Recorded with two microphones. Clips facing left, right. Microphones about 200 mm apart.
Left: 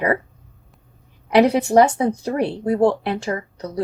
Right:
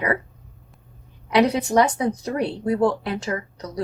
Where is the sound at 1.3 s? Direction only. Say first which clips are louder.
Left 4 dB; 30° left (ahead or behind).